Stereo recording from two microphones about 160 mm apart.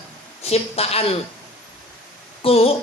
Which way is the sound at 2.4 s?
35° left (ahead or behind).